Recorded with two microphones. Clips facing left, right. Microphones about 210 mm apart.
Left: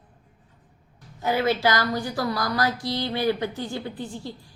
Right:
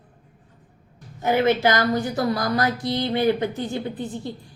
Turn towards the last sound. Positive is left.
turn(degrees=-20)  # may be behind; listen again after turning